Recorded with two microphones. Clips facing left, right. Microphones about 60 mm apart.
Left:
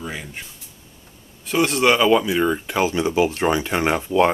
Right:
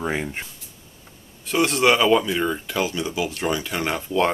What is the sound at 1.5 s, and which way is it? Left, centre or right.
Speech, centre.